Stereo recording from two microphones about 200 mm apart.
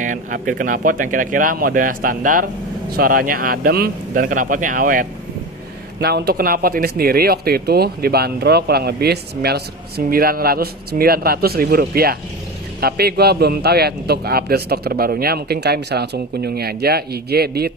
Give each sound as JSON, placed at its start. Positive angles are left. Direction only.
{"t": 0.0, "sound": "speech", "side_deg": -40}